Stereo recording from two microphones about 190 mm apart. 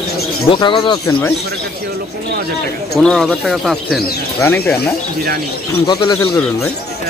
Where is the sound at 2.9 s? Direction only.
Centre (ahead or behind).